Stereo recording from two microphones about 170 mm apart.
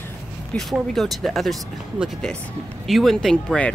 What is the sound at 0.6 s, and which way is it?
Speech, centre (ahead or behind).